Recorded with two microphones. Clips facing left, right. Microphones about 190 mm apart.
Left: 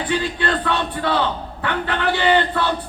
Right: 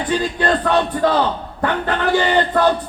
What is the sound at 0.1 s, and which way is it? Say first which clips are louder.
A man's voice: right 4 dB; 40° right (ahead or behind).